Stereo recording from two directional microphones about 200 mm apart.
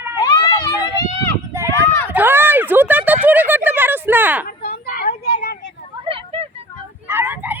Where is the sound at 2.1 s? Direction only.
10° right (ahead or behind).